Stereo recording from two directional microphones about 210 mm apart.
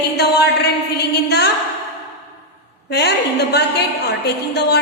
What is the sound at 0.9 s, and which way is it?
Speech, 50° left (ahead or behind).